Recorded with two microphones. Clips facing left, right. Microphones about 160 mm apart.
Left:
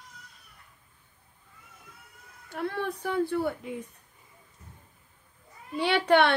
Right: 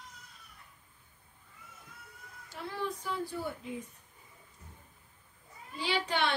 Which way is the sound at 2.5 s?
60° left (ahead or behind).